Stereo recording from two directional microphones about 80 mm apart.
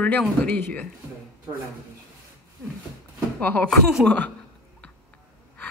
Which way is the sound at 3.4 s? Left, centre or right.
Left.